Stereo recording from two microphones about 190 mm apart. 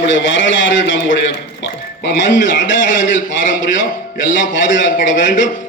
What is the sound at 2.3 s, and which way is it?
Speech, 45° left (ahead or behind).